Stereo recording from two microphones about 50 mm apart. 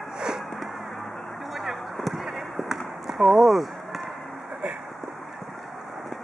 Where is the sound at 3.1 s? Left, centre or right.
Centre.